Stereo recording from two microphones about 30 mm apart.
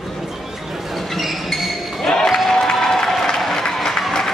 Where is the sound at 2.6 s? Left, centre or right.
Centre.